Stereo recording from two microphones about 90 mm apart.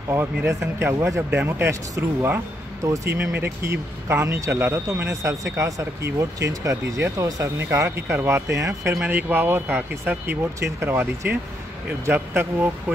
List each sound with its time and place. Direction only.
0.1 s speech: 25° right (ahead or behind)
2.8 s speech: 35° right (ahead or behind)
3.2 s speech: 25° right (ahead or behind)
9.0 s speech: 20° right (ahead or behind)